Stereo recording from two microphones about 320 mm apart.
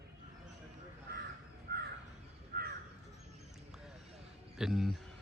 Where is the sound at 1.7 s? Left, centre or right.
Right.